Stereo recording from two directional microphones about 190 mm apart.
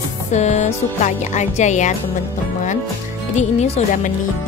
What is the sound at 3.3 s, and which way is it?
Speech, 35° left (ahead or behind).